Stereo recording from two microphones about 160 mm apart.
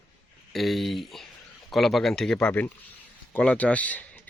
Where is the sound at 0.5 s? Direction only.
Centre (ahead or behind).